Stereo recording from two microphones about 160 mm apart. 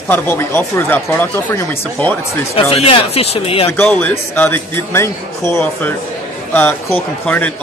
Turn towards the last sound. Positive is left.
turn(degrees=10)  # may be behind; listen again after turning